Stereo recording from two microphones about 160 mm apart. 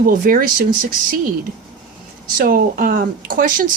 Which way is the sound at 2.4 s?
60° right (ahead or behind).